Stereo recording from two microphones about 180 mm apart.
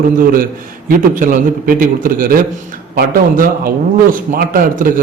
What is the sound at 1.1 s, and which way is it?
A man's voice, 50° right (ahead or behind).